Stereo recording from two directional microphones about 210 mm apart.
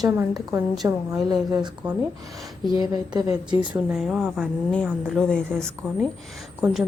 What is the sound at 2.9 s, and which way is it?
Speech, 20° right (ahead or behind).